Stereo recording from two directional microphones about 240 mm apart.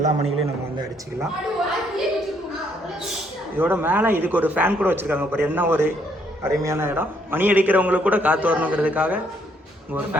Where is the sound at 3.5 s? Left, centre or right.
Centre.